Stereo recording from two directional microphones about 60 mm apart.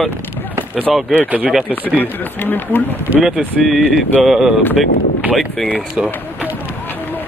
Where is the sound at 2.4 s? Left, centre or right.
Left.